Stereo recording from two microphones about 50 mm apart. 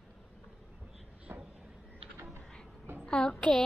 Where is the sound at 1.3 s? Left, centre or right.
Right.